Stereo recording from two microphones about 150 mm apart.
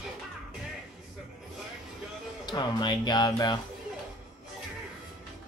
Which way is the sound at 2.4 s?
30° left (ahead or behind).